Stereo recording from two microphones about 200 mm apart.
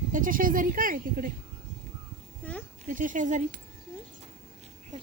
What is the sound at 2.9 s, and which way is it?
Speech, 40° right (ahead or behind).